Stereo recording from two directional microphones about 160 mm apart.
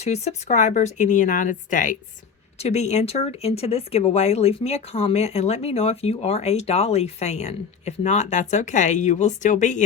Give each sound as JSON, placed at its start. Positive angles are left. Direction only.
{"t": 0.0, "sound": "speech", "side_deg": 45}
{"t": 2.6, "sound": "speech", "side_deg": 45}